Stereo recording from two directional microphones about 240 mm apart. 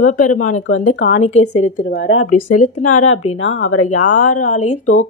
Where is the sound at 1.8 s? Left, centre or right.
Left.